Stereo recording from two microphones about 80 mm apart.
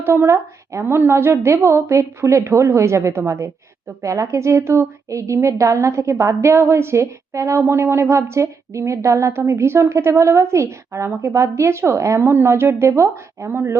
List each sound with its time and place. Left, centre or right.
0.0 s a woman's voice: right